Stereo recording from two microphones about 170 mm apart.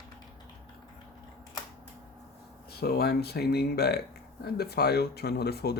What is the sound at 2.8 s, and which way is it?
Speech, 65° left (ahead or behind).